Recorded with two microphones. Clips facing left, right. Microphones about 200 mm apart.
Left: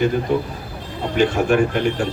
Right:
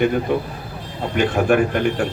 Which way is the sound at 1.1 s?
55° right (ahead or behind).